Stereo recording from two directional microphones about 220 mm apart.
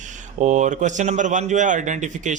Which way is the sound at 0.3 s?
35° right (ahead or behind).